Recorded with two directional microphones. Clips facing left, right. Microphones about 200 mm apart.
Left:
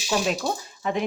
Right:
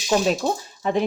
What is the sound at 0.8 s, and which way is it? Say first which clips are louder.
Speech: right 4 dB; 35° right (ahead or behind).